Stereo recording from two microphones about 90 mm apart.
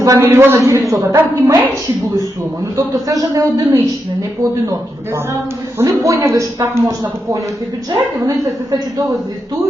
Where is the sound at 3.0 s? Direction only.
40° right (ahead or behind).